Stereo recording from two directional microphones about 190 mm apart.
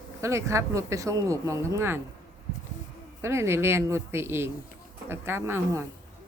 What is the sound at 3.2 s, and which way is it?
Speech, 15° right (ahead or behind).